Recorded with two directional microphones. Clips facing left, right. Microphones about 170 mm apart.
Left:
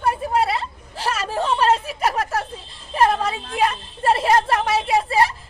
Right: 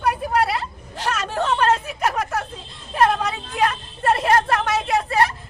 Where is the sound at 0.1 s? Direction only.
Centre (ahead or behind).